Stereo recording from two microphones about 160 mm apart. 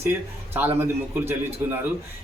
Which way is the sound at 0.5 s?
15° right (ahead or behind).